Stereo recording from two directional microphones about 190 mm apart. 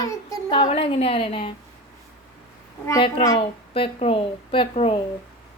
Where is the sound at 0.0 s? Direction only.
15° left (ahead or behind).